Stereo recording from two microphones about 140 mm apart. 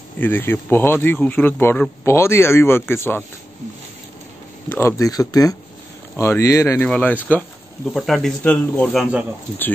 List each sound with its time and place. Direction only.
0.2 s speech: 15° left (ahead or behind)
4.6 s speech: 20° left (ahead or behind)